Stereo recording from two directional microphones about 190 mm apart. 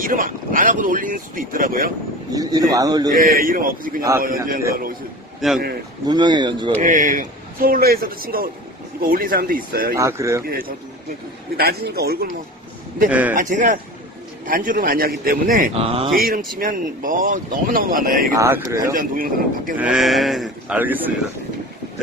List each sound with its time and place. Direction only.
0.0 s speech: 45° right (ahead or behind)
2.3 s speech: 20° right (ahead or behind)
3.2 s speech: 45° right (ahead or behind)
5.4 s speech: centre (ahead or behind)
6.0 s speech: 25° right (ahead or behind)
6.8 s speech: 45° right (ahead or behind)
9.9 s speech: 15° right (ahead or behind)
10.4 s a man's voice: 50° right (ahead or behind)
13.3 s speech: 40° right (ahead or behind)
15.7 s speech: 30° right (ahead or behind)
16.2 s speech: 50° right (ahead or behind)
18.3 s speech: 15° right (ahead or behind)
18.9 s speech: 50° right (ahead or behind)
19.8 s speech: centre (ahead or behind)